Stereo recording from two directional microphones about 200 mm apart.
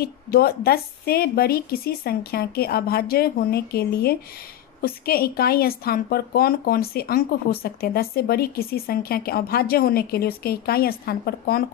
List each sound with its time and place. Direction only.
0.0 s speech: 50° left (ahead or behind)